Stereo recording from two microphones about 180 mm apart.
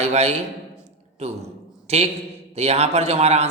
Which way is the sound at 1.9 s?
35° right (ahead or behind).